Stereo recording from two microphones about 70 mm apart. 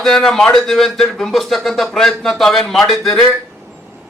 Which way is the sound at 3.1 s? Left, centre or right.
Centre.